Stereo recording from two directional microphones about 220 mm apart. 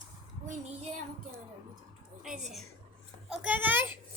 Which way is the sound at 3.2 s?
5° right (ahead or behind).